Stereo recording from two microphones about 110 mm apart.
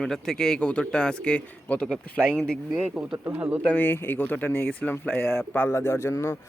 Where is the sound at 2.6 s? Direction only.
10° right (ahead or behind).